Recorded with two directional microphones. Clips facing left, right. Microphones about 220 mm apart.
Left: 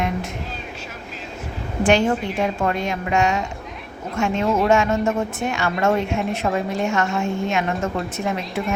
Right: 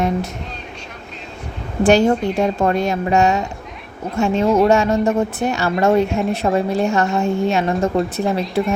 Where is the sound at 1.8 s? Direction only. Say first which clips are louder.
Right 5 dB; 40° right (ahead or behind).